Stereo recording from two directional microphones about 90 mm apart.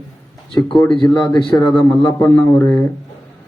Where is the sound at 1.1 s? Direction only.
50° left (ahead or behind).